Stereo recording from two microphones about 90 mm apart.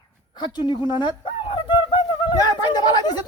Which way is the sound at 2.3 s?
50° left (ahead or behind).